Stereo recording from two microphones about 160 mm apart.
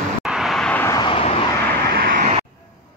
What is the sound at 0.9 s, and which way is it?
Vehicle, 35° left (ahead or behind).